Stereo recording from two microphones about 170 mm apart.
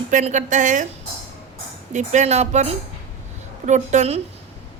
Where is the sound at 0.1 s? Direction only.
45° right (ahead or behind).